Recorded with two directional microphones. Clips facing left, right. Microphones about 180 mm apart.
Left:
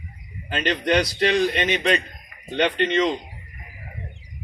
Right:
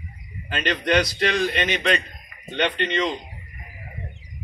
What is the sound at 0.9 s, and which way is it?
Speech, 15° left (ahead or behind).